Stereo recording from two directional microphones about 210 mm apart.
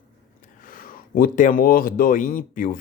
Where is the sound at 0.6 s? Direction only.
40° left (ahead or behind).